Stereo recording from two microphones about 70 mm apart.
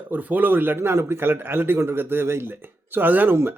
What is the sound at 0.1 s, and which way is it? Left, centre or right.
Speech, right.